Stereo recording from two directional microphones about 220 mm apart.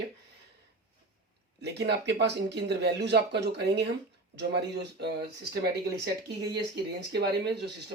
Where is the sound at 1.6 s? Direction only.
50° right (ahead or behind).